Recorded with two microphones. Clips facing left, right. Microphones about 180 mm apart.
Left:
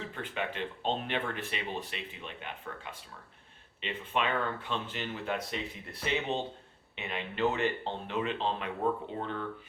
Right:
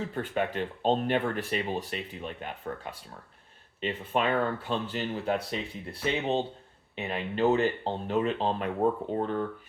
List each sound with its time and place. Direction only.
0.1 s speech: 40° right (ahead or behind)